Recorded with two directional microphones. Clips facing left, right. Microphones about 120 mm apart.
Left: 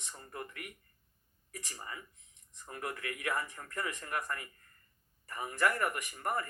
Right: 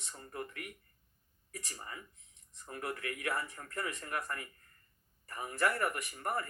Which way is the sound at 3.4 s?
20° left (ahead or behind).